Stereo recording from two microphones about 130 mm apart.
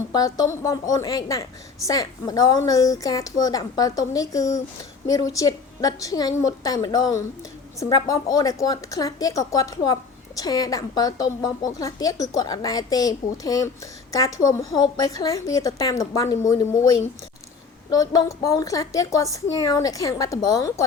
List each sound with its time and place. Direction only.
0.1 s a woman's voice: 30° left (ahead or behind)
17.8 s a woman's voice: 30° left (ahead or behind)